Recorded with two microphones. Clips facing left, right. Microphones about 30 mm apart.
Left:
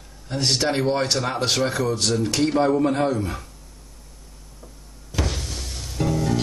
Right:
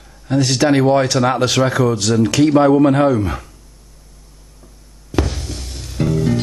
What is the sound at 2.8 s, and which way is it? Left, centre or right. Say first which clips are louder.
Speech: right 8 dB; right.